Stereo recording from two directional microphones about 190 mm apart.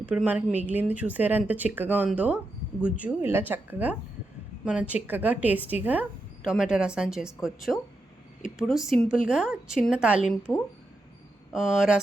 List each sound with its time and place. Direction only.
0.0 s a woman's voice: 10° right (ahead or behind)
11.5 s a woman's voice: 5° right (ahead or behind)